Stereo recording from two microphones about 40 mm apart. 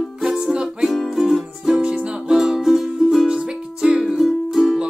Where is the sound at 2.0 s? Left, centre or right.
Right.